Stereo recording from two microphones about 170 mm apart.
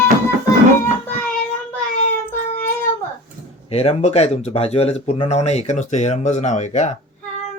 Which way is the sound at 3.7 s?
35° left (ahead or behind).